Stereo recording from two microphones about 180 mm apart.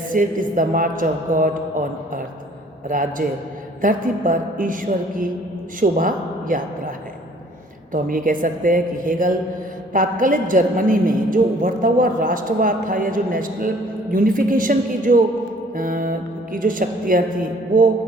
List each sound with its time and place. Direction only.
0.1 s a woman's voice: 50° right (ahead or behind)
2.9 s a woman's voice: 50° right (ahead or behind)
7.9 s a woman's voice: 50° right (ahead or behind)